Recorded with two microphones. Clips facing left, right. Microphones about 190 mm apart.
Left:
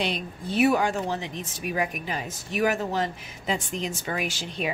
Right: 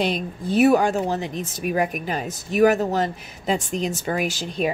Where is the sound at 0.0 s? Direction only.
45° right (ahead or behind).